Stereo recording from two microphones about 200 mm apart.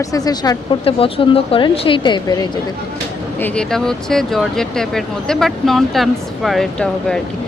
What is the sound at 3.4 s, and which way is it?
Speech, 5° left (ahead or behind).